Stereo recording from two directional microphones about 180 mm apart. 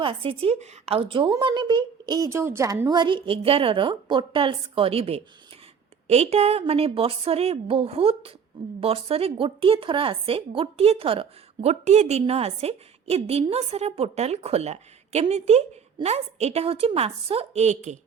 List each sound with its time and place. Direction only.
0.0 s a woman's voice: 30° right (ahead or behind)